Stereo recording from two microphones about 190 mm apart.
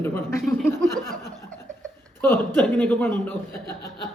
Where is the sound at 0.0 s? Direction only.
15° left (ahead or behind).